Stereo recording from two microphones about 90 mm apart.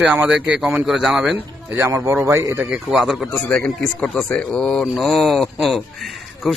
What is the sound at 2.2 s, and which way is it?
Speech, 35° right (ahead or behind).